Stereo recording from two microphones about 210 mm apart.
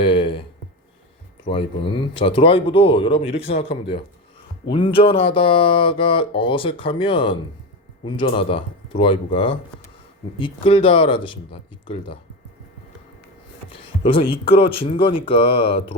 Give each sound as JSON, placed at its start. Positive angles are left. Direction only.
{"t": 0.0, "sound": "a sound", "side_deg": 25}
{"t": 1.5, "sound": "speech", "side_deg": 25}
{"t": 13.7, "sound": "speech", "side_deg": 25}